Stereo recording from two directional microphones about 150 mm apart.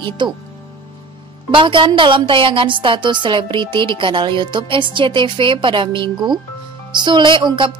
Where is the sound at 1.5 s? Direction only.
35° right (ahead or behind).